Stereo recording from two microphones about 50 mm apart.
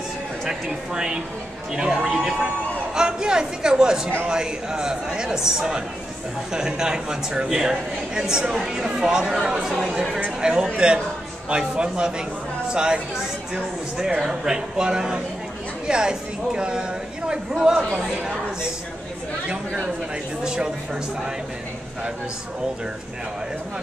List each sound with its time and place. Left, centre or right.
0.5 s a man's voice: centre
19.5 s a man's voice: centre